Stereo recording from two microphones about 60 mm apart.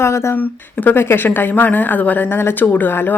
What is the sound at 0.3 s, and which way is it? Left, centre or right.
A woman's voice, left.